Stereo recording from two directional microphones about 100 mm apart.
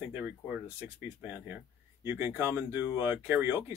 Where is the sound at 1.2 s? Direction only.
15° right (ahead or behind).